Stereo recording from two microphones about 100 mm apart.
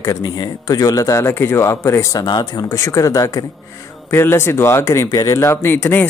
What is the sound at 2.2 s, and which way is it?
Speech, 45° left (ahead or behind).